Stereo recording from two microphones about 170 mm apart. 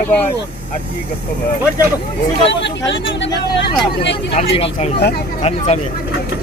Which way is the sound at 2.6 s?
90° left.